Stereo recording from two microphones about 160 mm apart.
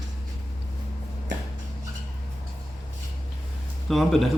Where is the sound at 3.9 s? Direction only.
Centre (ahead or behind).